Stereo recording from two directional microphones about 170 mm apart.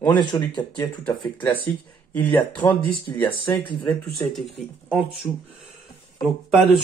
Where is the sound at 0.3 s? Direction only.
20° left (ahead or behind); by 5.0 s centre (ahead or behind).